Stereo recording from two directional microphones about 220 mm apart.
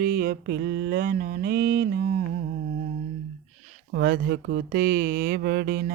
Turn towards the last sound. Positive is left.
turn(degrees=-45)  # may be behind; listen again after turning